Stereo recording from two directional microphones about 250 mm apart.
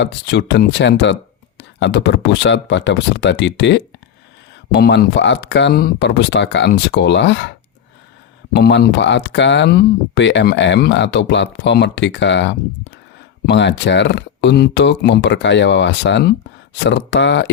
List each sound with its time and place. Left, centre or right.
0.0 s speech: left
8.5 s speech: left